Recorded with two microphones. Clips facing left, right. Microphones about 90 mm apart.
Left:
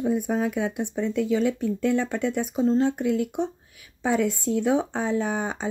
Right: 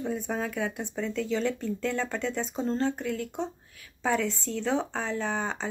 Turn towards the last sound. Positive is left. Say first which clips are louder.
# left 3 dB
turn(degrees=15)  # may be behind; listen again after turning